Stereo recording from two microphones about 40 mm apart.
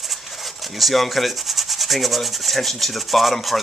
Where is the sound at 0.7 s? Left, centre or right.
Centre.